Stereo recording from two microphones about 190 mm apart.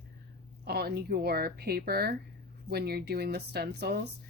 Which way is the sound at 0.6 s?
55° right (ahead or behind).